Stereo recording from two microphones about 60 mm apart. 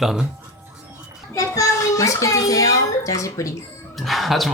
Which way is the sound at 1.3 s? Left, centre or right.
Left.